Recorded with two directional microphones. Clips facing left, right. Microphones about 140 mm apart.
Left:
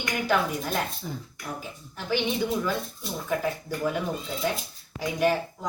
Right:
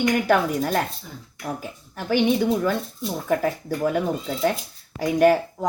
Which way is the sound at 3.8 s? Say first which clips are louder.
Right 5 dB; 55° right (ahead or behind).